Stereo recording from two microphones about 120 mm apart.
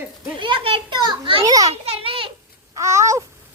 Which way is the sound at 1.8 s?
50° right (ahead or behind).